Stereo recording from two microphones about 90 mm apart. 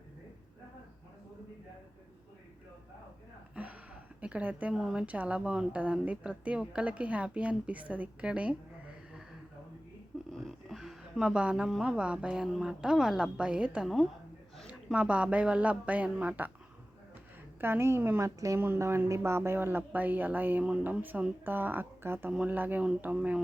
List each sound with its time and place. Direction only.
3.5 s a sound: 15° right (ahead or behind)
4.2 s speech: 15° right (ahead or behind)
4.7 s speech: 5° right (ahead or behind)
5.0 s a woman's voice: 15° right (ahead or behind)
10.3 s a woman's voice: centre (ahead or behind)
14.9 s a woman's voice: 15° right (ahead or behind)
17.6 s speech: 25° right (ahead or behind)
18.3 s speech: 40° right (ahead or behind)
18.6 s speech: 25° right (ahead or behind)
22.3 s a woman's voice: 15° right (ahead or behind)